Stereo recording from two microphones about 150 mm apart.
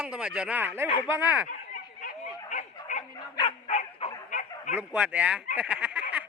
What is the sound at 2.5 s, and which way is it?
Bow-wow, 55° left (ahead or behind).